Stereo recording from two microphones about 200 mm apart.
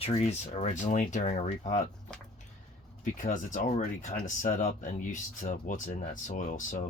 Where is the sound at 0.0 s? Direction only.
35° left (ahead or behind).